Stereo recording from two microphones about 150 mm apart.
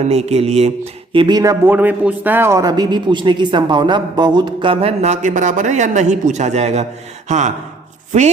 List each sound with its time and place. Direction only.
0.1 s speech: 45° right (ahead or behind)
1.1 s speech: 30° right (ahead or behind)
1.7 s a man's voice: 10° right (ahead or behind); by 8.3 s 50° right (ahead or behind)